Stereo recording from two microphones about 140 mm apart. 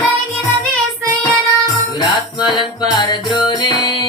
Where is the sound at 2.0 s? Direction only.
30° left (ahead or behind).